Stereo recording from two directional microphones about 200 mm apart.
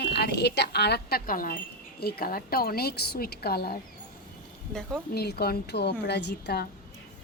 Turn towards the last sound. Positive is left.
turn(degrees=55)  # may be behind; listen again after turning